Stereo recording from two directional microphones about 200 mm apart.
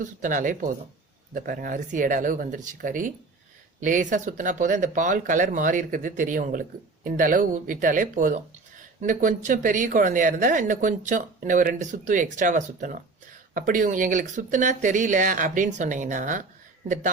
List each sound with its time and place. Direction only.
0.0 s speech: 40° right (ahead or behind)